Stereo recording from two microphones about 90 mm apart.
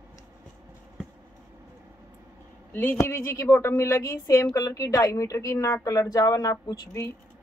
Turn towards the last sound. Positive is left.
turn(degrees=35)  # may be behind; listen again after turning